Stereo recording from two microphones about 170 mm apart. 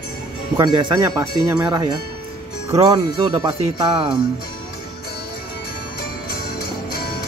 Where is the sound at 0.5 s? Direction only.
25° right (ahead or behind).